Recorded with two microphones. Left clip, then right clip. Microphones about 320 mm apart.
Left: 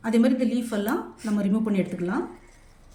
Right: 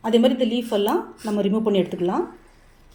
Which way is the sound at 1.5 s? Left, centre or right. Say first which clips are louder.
Right 6 dB; centre.